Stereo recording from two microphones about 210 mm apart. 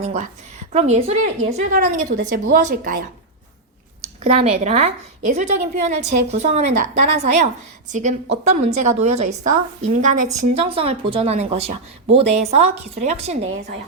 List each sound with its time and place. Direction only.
0.0 s a woman's voice: 35° right (ahead or behind)
4.2 s a woman's voice: 30° right (ahead or behind)